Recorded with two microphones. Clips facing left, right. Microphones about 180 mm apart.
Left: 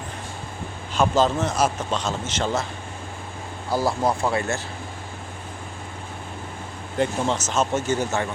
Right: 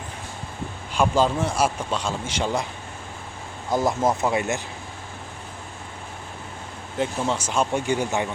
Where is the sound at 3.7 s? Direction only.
20° right (ahead or behind).